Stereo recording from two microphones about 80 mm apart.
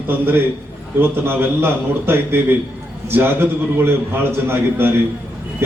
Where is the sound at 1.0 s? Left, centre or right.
Right.